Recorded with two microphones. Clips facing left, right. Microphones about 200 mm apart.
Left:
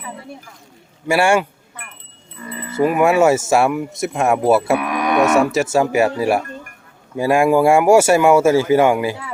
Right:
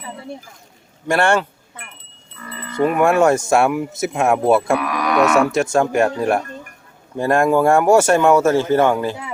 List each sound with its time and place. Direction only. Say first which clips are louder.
1.0 s speech: left 1 dB; 10° left (ahead or behind)
2.4 s chime: left 3 dB; 20° left (ahead or behind)
2.7 s speech: left 1 dB; 5° left (ahead or behind)
4.8 s speech: left 1 dB; 20° left (ahead or behind)
5.2 s speech: even; centre (ahead or behind)